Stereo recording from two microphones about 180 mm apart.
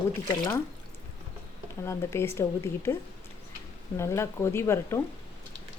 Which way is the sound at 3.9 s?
15° left (ahead or behind).